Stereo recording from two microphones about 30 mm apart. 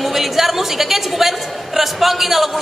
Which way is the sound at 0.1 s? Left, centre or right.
Centre.